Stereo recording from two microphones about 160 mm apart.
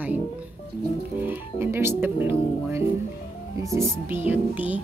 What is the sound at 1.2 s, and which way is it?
Speech, 15° right (ahead or behind).